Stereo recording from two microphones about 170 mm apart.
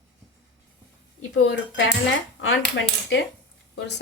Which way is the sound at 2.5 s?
90° left.